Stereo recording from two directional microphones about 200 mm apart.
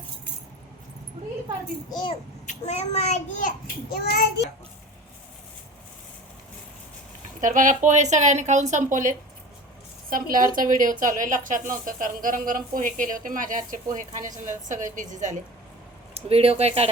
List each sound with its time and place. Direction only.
1.9 s a child's voice: 20° left (ahead or behind)
2.5 s a child's voice: 30° left (ahead or behind)
3.9 s a child's voice: 50° left (ahead or behind)
7.4 s a woman's voice: 40° right (ahead or behind)